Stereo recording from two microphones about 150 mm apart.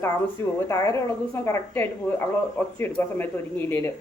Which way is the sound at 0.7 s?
20° left (ahead or behind).